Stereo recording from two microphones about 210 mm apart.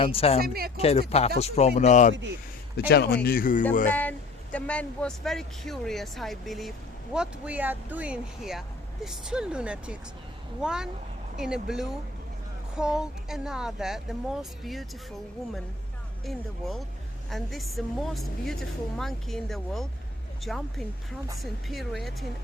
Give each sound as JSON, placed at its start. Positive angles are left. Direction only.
{"t": 0.0, "sound": "speech", "side_deg": 25}
{"t": 0.4, "sound": "speech", "side_deg": -45}
{"t": 0.8, "sound": "speech", "side_deg": 30}
{"t": 2.7, "sound": "speech", "side_deg": 50}
{"t": 3.8, "sound": "speech", "side_deg": 10}
{"t": 16.2, "sound": "speech", "side_deg": 0}